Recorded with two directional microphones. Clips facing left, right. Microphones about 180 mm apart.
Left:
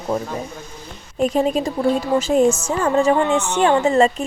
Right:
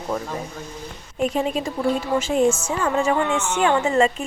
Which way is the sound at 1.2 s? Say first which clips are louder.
Left 4 dB; 40° left (ahead or behind).